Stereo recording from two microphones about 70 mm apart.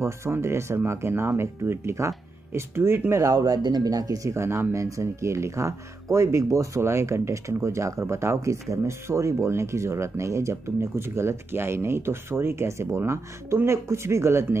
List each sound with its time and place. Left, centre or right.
0.0 s speech: right
3.3 s speech: right